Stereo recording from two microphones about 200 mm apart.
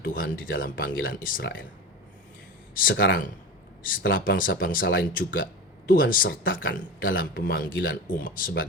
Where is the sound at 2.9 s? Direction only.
70° left (ahead or behind).